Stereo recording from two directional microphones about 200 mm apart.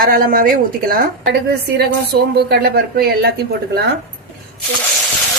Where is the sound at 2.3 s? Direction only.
55° right (ahead or behind).